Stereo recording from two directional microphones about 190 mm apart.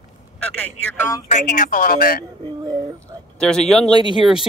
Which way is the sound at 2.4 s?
20° right (ahead or behind).